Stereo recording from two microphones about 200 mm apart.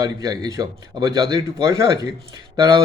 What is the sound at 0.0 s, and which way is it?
A man's voice, 15° right (ahead or behind).